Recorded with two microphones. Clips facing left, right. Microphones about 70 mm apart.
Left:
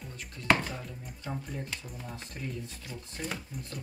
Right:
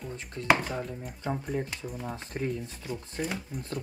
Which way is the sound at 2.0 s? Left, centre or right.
Right.